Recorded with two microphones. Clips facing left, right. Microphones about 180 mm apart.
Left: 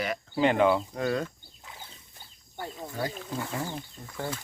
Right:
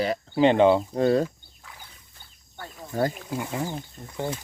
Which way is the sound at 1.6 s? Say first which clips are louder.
Left 1 dB; 25° left (ahead or behind).